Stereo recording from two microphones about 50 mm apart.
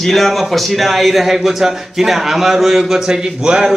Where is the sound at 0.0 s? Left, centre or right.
Centre.